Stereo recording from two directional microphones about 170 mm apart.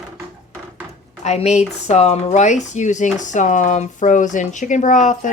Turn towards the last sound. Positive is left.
turn(degrees=45)  # may be behind; listen again after turning